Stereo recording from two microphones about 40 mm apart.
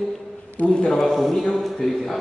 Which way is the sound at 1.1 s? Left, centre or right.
Centre.